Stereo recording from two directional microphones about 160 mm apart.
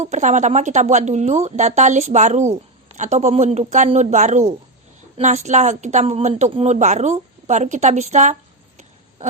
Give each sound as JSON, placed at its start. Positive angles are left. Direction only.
{"t": 0.0, "sound": "speech", "side_deg": -45}